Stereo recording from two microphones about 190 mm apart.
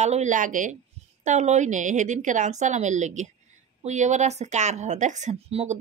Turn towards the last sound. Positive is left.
turn(degrees=-35)  # may be behind; listen again after turning